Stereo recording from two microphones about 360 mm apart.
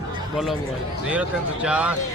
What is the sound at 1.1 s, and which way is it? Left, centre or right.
Speech, centre.